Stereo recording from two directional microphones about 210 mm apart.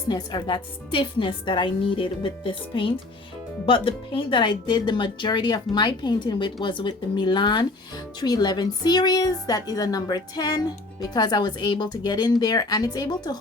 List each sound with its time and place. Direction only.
0.1 s speech: 20° left (ahead or behind)